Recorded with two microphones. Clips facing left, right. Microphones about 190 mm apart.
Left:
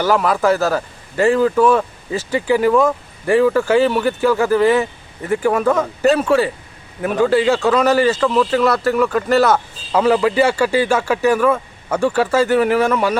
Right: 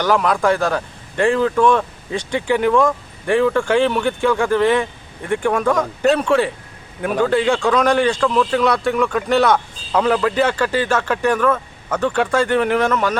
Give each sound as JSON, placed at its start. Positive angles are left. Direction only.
{"t": 0.0, "sound": "speech", "side_deg": 5}